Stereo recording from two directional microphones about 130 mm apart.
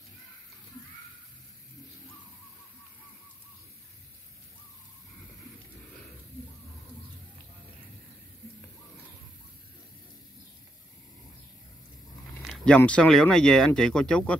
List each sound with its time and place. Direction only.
12.4 s speech: centre (ahead or behind)